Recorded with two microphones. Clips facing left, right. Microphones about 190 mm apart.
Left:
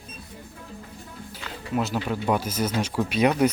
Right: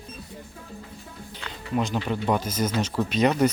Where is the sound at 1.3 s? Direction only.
5° left (ahead or behind).